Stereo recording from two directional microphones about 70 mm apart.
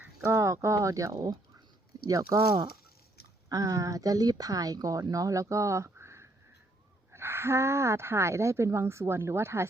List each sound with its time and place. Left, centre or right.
0.2 s speech: right
1.1 s speech: right
2.0 s speech: right
3.5 s a woman's voice: right